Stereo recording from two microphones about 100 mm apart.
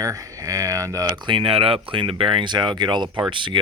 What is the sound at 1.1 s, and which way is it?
Speech, 55° right (ahead or behind).